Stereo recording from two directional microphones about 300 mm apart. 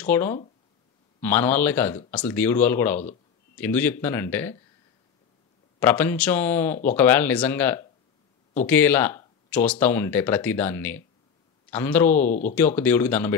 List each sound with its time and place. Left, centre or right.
0.0 s speech: centre
5.8 s speech: centre
12.3 s speech: left
12.5 s speech: centre